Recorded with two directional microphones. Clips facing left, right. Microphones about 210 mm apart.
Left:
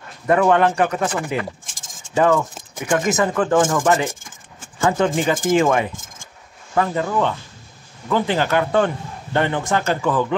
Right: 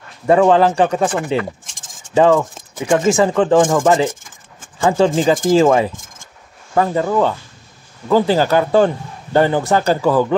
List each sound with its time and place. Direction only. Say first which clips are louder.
0.3 s speech: right 4 dB; 30° right (ahead or behind)
2.8 s a man's voice: right 5 dB; 30° right (ahead or behind)